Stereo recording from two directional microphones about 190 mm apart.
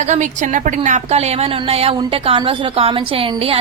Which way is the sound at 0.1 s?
40° right (ahead or behind).